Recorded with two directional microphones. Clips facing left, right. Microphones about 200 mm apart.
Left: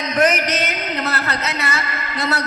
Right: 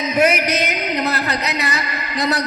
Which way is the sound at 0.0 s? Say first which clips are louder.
Right 1 dB; 10° right (ahead or behind).